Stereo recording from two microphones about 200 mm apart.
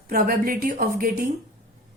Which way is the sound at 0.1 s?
45° right (ahead or behind).